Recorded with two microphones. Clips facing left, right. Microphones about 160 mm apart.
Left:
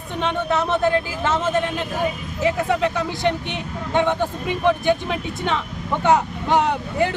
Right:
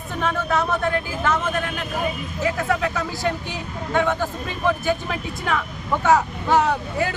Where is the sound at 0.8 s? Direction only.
30° left (ahead or behind).